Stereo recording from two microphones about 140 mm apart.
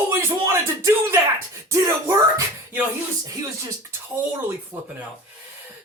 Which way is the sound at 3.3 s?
25° right (ahead or behind).